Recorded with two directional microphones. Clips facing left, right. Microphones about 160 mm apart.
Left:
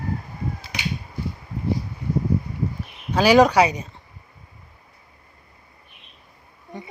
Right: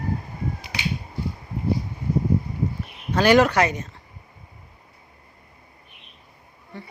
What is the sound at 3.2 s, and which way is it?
Speech, 10° left (ahead or behind).